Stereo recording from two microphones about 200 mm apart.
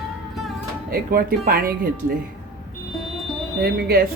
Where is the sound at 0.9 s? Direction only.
50° right (ahead or behind).